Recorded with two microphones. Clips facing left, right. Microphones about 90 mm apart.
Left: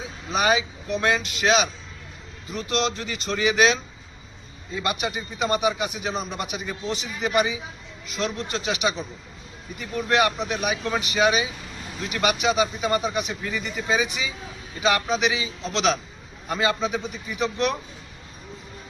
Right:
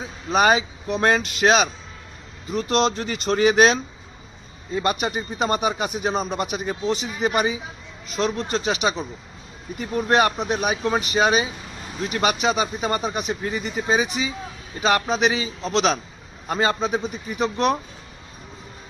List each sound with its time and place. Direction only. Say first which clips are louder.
0.3 s a man's voice: right 4 dB; 45° right (ahead or behind)